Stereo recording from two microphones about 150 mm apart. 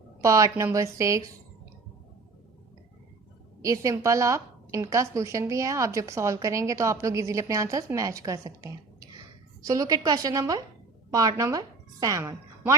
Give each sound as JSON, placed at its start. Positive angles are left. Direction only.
{"t": 0.2, "sound": "a woman's voice", "side_deg": -20}
{"t": 3.6, "sound": "a woman's voice", "side_deg": -20}